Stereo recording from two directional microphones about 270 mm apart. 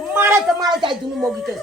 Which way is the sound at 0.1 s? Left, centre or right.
Centre.